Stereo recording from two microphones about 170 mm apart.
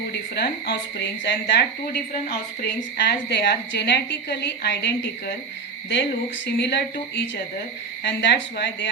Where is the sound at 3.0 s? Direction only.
75° left (ahead or behind).